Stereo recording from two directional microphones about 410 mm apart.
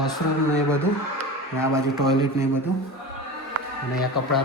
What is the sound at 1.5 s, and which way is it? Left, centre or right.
Speech, centre.